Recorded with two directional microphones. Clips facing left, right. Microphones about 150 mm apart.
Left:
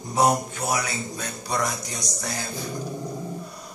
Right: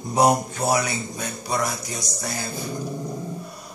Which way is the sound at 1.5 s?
5° right (ahead or behind).